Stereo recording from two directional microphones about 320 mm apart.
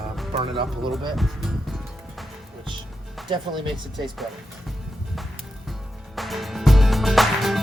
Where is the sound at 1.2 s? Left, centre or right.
Centre.